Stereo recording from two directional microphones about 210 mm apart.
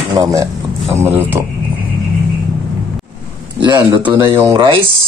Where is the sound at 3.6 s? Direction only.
20° right (ahead or behind).